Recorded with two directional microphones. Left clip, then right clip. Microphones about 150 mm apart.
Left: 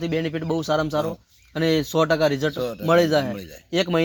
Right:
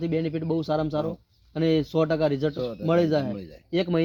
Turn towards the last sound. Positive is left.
turn(degrees=15)  # may be behind; listen again after turning